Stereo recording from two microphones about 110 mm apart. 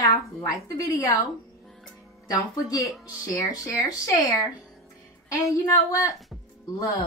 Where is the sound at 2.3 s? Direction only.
35° left (ahead or behind).